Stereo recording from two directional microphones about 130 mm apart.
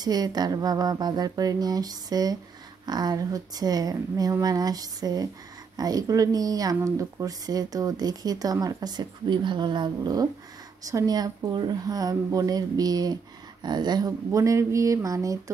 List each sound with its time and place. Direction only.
0.0 s speech: 30° right (ahead or behind)